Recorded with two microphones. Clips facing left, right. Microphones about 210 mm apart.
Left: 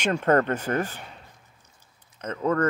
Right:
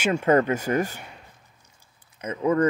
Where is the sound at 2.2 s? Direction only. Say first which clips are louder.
Right 3 dB; 10° right (ahead or behind).